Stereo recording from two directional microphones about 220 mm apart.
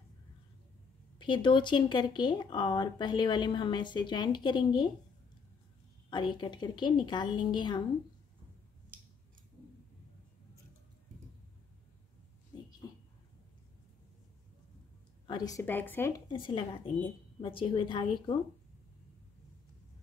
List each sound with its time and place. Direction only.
1.1 s speech: 20° left (ahead or behind)
6.0 s speech: 20° left (ahead or behind)
12.5 s a sound: 20° left (ahead or behind)
15.2 s a woman's voice: 15° left (ahead or behind)
16.3 s speech: 20° left (ahead or behind)